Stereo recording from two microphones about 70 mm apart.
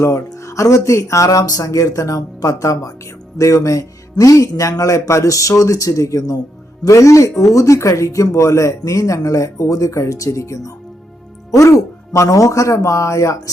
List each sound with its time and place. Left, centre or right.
0.3 s speech: left